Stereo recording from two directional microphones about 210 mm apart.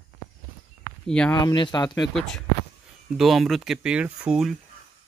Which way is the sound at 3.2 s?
Centre (ahead or behind).